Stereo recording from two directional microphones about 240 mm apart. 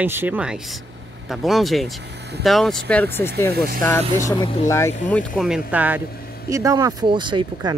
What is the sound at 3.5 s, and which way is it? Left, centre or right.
Speech, right.